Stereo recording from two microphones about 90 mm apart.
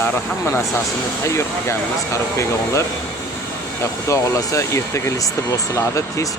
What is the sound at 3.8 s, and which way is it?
Speech, 35° left (ahead or behind).